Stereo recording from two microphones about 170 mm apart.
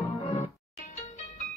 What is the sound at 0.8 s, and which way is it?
Music, 45° left (ahead or behind).